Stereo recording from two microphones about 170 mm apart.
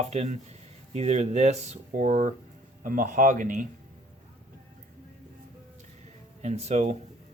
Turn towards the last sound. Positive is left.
turn(degrees=-40)  # may be behind; listen again after turning